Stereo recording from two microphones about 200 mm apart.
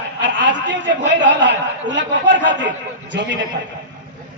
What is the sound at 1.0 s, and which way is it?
A man's voice, 60° right (ahead or behind).